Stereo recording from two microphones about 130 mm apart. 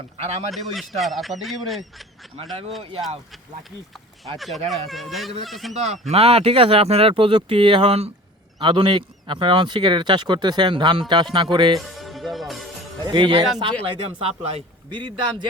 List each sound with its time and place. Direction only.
0.2 s speech: 55° right (ahead or behind)
0.5 s speech: centre (ahead or behind)
4.4 s speech: centre (ahead or behind)
5.8 s speech: 50° right (ahead or behind)
8.6 s speech: 35° right (ahead or behind)
11.8 s music: centre (ahead or behind)
13.0 s speech: 35° right (ahead or behind)